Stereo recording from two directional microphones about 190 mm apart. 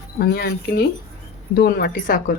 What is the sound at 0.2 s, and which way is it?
A woman's voice, 55° left (ahead or behind).